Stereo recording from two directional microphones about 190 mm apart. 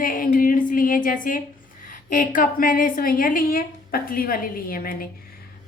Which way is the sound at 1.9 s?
45° left (ahead or behind).